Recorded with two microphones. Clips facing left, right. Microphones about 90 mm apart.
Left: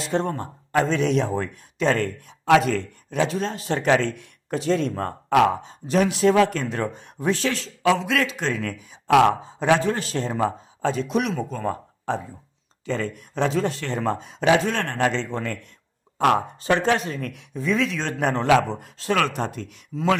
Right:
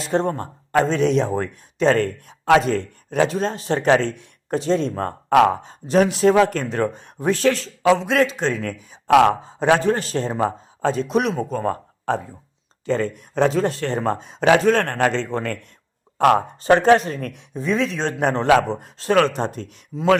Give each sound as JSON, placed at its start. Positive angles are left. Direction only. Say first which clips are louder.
{"t": 0.0, "sound": "speech", "louder": "right 3 dB", "side_deg": -35}
{"t": 12.8, "sound": "speech", "louder": "right 5 dB", "side_deg": -35}
{"t": 14.4, "sound": "a man's voice", "louder": "right 4 dB", "side_deg": -50}
{"t": 19.9, "sound": "speech", "louder": "even", "side_deg": -10}